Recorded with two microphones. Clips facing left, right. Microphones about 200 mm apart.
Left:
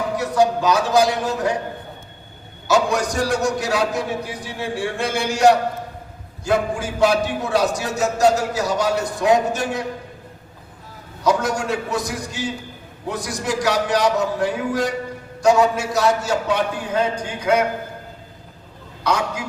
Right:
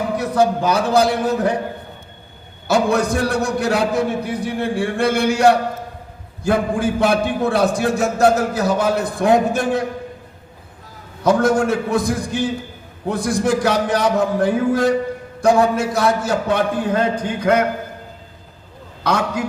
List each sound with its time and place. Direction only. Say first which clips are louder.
0.2 s a man's voice: even; 60° right (ahead or behind)
2.6 s a man's voice: right 2 dB; 60° right (ahead or behind)
11.2 s a man's voice: right 5 dB; 55° right (ahead or behind)
19.0 s a man's voice: right 3 dB; 60° right (ahead or behind)